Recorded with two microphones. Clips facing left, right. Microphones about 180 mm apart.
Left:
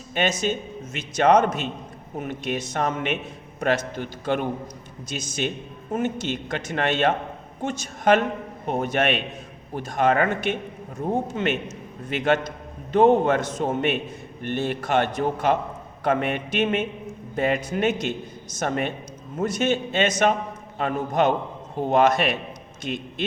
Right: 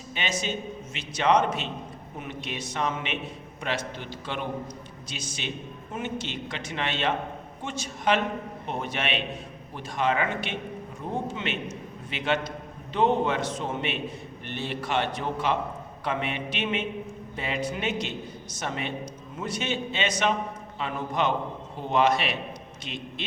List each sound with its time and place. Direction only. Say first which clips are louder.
0.1 s a man's voice: left 7 dB; 45° left (ahead or behind)